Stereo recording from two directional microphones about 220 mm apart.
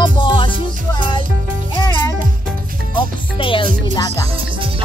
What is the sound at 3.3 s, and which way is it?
Speech, 25° left (ahead or behind).